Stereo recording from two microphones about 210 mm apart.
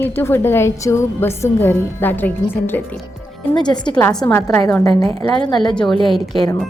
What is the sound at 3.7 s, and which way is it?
A woman's voice, 20° left (ahead or behind).